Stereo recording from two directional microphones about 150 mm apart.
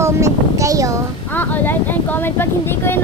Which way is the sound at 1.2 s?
10° left (ahead or behind).